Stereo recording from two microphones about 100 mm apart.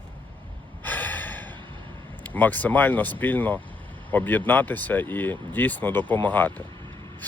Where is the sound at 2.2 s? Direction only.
15° left (ahead or behind).